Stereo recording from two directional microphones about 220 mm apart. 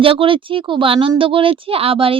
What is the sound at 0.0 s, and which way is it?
Speech, 25° right (ahead or behind).